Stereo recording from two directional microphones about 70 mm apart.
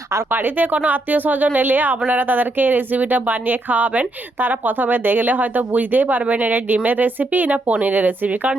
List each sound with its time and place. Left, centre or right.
0.3 s speech: right